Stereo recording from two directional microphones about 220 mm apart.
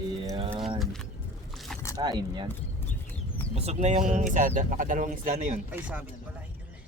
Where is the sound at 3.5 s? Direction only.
30° right (ahead or behind).